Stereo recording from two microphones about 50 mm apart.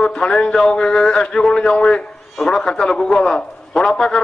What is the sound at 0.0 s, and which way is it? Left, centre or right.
A man's voice, centre.